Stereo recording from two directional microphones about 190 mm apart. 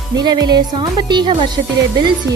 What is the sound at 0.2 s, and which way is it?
Speech, 20° right (ahead or behind).